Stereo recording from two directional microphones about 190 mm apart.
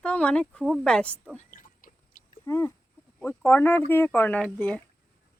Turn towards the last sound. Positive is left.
turn(degrees=5)  # may be behind; listen again after turning